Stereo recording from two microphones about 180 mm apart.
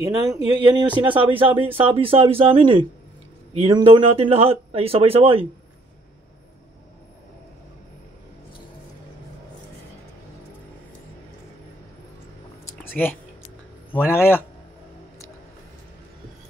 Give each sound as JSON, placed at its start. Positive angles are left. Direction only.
{"t": 0.0, "sound": "speech", "side_deg": -20}
{"t": 12.7, "sound": "a sound", "side_deg": 10}
{"t": 14.1, "sound": "a man's voice", "side_deg": 15}